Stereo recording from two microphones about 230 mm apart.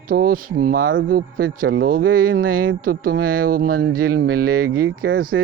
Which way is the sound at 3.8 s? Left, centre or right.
Right.